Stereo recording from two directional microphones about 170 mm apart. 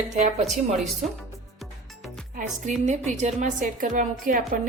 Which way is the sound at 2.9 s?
45° right (ahead or behind).